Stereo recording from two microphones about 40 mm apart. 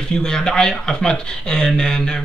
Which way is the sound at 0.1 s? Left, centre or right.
Centre.